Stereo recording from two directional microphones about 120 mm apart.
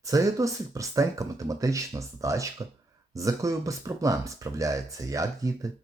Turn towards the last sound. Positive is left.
turn(degrees=-30)  # may be behind; listen again after turning